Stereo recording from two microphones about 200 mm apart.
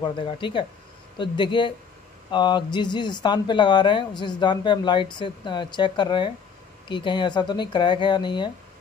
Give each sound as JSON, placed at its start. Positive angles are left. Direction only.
{"t": 0.0, "sound": "speech", "side_deg": 25}